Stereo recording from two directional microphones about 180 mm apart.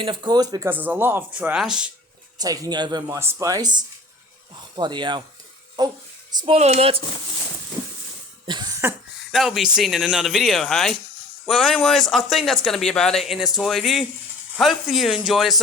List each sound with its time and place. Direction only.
0.0 s speech: 25° right (ahead or behind); by 1.9 s 5° right (ahead or behind)
2.4 s speech: 20° right (ahead or behind)
8.4 s cough: 25° right (ahead or behind)
9.3 s speech: centre (ahead or behind)